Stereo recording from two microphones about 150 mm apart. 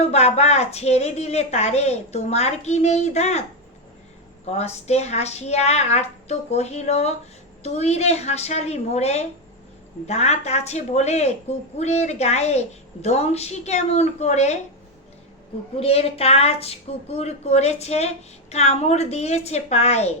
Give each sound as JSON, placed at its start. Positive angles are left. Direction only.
{"t": 0.0, "sound": "a woman's voice", "side_deg": 45}
{"t": 4.4, "sound": "a woman's voice", "side_deg": 45}
{"t": 15.8, "sound": "a woman's voice", "side_deg": 40}